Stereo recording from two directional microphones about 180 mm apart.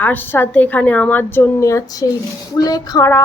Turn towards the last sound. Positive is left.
turn(degrees=20)  # may be behind; listen again after turning